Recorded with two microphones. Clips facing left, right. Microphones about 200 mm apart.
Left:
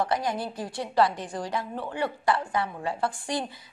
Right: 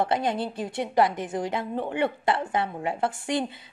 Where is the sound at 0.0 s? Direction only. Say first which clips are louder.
Right 2 dB; 25° right (ahead or behind).